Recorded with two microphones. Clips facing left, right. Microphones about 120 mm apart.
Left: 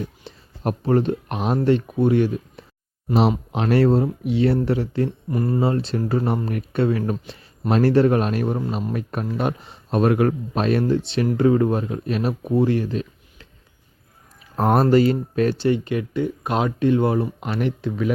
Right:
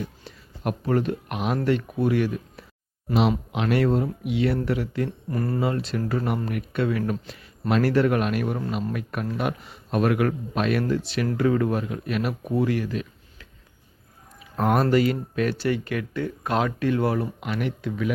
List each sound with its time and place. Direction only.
0.3 s speech: 30° left (ahead or behind)
5.3 s speech: 20° left (ahead or behind)
5.6 s speech: 30° left (ahead or behind)
14.5 s speech: 35° left (ahead or behind)
17.4 s speech: 35° left (ahead or behind)